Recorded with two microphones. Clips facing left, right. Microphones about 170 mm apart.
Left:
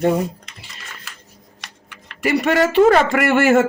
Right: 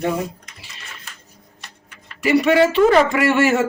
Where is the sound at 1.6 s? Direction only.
90° left.